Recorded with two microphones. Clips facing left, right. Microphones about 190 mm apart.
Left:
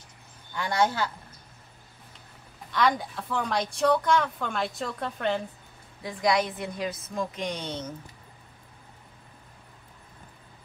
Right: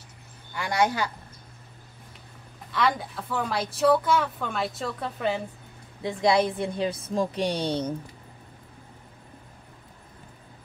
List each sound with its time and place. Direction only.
0.6 s speech: 10° right (ahead or behind)
2.7 s speech: centre (ahead or behind)
6.0 s a woman's voice: 25° right (ahead or behind)